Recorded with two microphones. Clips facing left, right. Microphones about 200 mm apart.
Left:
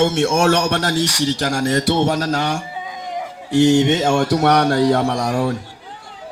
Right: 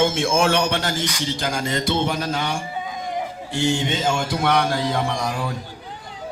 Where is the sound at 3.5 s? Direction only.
70° left (ahead or behind).